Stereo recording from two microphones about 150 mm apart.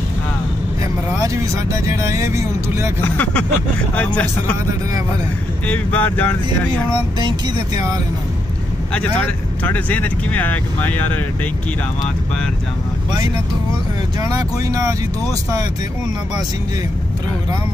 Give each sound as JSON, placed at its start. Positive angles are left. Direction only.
{"t": 1.2, "sound": "speech", "side_deg": -20}
{"t": 3.0, "sound": "speech", "side_deg": 10}
{"t": 5.7, "sound": "speech", "side_deg": 10}
{"t": 7.2, "sound": "speech", "side_deg": -30}
{"t": 9.2, "sound": "speech", "side_deg": 10}
{"t": 14.2, "sound": "speech", "side_deg": -20}